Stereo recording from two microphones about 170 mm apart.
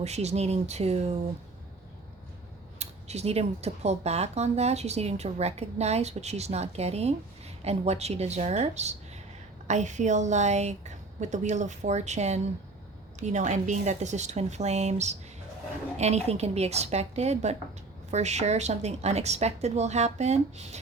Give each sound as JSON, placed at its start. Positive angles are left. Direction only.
{"t": 0.0, "sound": "speech", "side_deg": -40}
{"t": 2.7, "sound": "a woman's voice", "side_deg": -40}